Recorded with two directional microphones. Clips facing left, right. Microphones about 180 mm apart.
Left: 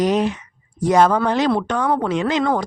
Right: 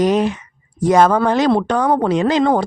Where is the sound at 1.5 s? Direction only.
35° right (ahead or behind).